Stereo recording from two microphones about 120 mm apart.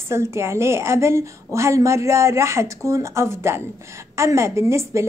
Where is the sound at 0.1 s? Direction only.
20° right (ahead or behind).